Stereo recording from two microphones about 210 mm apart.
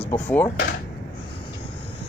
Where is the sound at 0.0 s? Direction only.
10° left (ahead or behind).